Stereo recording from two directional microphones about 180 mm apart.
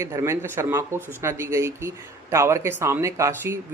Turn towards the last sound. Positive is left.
turn(degrees=-15)  # may be behind; listen again after turning